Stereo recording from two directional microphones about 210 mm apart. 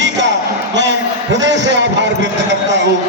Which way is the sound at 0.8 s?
60° right (ahead or behind).